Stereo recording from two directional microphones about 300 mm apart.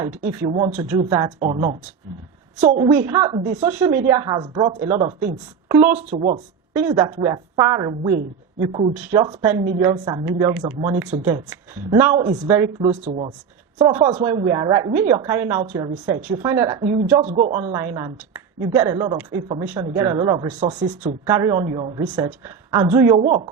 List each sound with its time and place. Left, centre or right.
0.3 s a woman's voice: centre
2.7 s a woman's voice: right
5.9 s a woman's voice: right
11.4 s a woman's voice: centre; by 21.2 s right
21.2 s a woman's voice: centre